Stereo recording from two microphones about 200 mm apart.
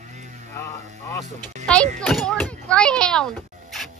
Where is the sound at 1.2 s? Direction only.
35° right (ahead or behind).